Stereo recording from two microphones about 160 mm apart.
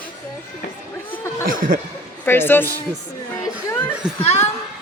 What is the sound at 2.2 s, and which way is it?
Speech, 15° left (ahead or behind).